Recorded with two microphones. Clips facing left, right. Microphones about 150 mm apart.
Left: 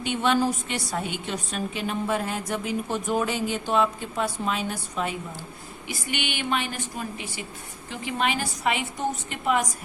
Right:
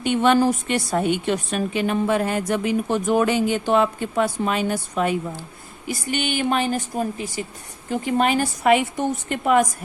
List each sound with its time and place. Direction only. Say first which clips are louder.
0.0 s a woman's voice: right 6 dB; 55° right (ahead or behind)
5.9 s speech: right 7 dB; 40° right (ahead or behind)